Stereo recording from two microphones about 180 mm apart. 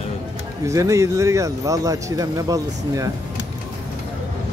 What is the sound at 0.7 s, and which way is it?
Speech, 15° right (ahead or behind).